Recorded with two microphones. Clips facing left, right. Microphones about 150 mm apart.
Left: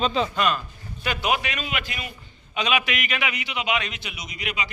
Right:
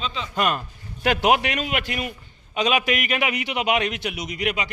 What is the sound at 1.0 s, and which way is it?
A man's voice, 90° right.